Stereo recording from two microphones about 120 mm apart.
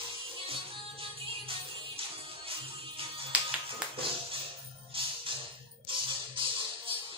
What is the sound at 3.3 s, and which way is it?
Music, 10° right (ahead or behind).